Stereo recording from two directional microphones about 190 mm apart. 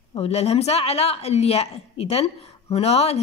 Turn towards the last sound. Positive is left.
turn(degrees=35)  # may be behind; listen again after turning